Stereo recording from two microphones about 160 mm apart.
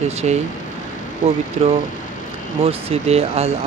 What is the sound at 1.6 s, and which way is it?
Speech, 40° right (ahead or behind).